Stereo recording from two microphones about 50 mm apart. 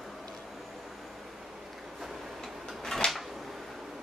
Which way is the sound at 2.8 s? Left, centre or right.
Centre.